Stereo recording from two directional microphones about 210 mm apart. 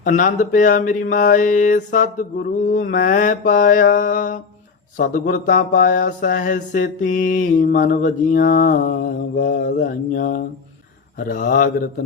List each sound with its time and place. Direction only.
0.0 s mantra: 40° left (ahead or behind)